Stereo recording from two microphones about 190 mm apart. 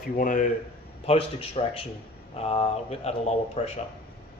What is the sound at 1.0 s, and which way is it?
Speech, 30° left (ahead or behind).